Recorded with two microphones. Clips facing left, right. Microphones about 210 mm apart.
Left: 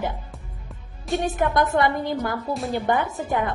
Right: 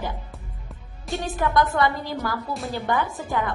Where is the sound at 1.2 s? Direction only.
20° left (ahead or behind).